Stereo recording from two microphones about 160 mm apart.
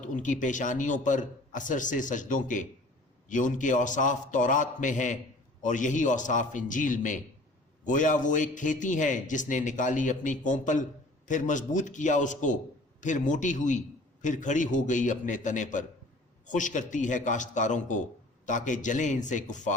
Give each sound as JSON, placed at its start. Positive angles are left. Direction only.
{"t": 0.0, "sound": "a man's voice", "side_deg": 50}